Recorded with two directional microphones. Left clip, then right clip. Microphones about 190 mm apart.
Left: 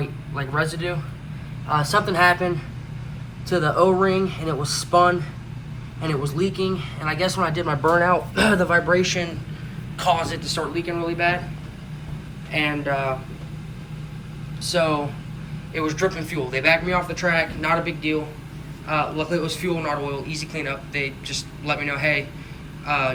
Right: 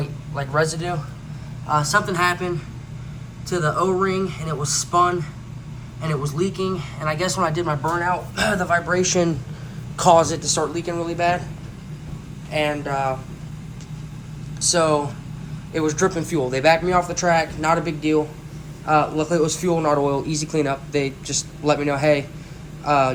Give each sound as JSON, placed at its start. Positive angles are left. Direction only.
{"t": 0.3, "sound": "speech", "side_deg": -5}
{"t": 3.9, "sound": "speech", "side_deg": 5}
{"t": 6.2, "sound": "speech", "side_deg": 0}
{"t": 7.9, "sound": "speech", "side_deg": 10}
{"t": 9.0, "sound": "speech", "side_deg": -15}
{"t": 10.0, "sound": "speech", "side_deg": -30}
{"t": 12.5, "sound": "speech", "side_deg": -5}
{"t": 14.6, "sound": "speech", "side_deg": -10}
{"t": 15.9, "sound": "a man's voice", "side_deg": -25}